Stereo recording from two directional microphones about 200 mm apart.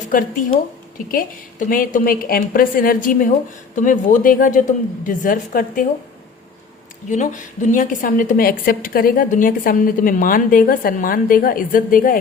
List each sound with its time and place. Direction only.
0.9 s a woman's voice: 45° left (ahead or behind)
7.1 s a woman's voice: 35° left (ahead or behind)